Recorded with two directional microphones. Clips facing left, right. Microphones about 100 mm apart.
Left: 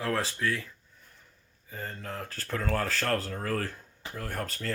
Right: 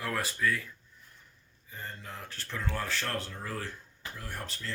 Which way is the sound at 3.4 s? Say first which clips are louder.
Left 6 dB; 60° left (ahead or behind).